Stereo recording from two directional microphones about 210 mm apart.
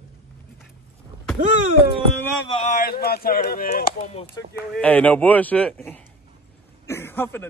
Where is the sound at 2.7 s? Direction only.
45° left (ahead or behind).